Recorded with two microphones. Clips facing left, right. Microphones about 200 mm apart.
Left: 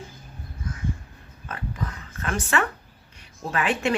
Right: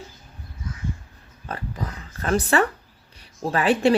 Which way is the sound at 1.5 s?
35° right (ahead or behind).